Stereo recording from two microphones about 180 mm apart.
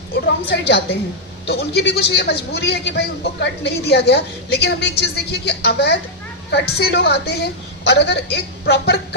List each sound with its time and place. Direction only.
0.1 s a woman's voice: 65° left (ahead or behind)